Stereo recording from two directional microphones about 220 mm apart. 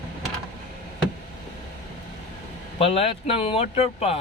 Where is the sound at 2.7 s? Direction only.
25° left (ahead or behind).